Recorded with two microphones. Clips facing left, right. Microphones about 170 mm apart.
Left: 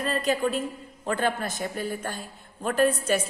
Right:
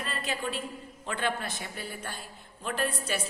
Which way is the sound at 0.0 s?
40° left (ahead or behind).